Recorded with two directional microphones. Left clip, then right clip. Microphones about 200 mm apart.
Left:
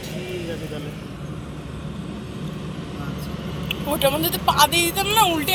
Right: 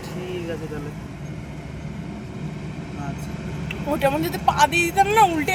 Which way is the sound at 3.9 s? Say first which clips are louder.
Even; 40° right (ahead or behind).